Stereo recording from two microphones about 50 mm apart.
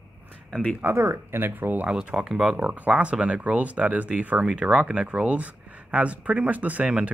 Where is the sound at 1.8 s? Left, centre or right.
Right.